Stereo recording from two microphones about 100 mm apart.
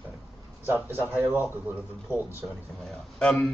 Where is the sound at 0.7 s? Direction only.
20° right (ahead or behind).